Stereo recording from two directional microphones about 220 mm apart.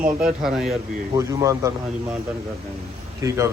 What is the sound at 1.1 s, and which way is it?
Speech, 15° right (ahead or behind).